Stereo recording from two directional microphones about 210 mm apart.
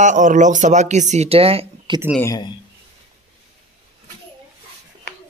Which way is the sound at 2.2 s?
15° left (ahead or behind).